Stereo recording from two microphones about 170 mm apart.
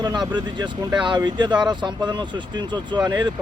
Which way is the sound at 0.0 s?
25° right (ahead or behind).